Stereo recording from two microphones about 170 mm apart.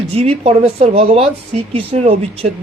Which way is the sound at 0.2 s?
35° right (ahead or behind).